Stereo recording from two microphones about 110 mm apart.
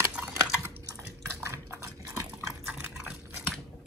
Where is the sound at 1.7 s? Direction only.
30° right (ahead or behind).